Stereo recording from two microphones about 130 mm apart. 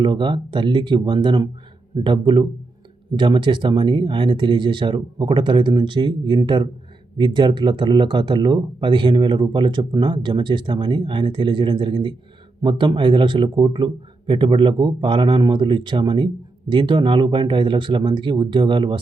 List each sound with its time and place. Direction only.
0.0 s speech: 40° right (ahead or behind)